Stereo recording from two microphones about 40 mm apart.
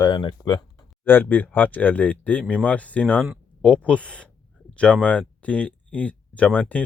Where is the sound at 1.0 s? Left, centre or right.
Left.